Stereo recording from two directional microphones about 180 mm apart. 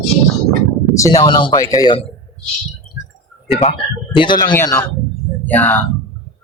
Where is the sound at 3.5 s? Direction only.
35° left (ahead or behind).